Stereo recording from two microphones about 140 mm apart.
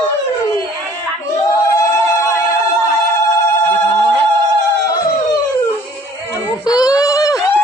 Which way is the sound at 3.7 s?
15° left (ahead or behind).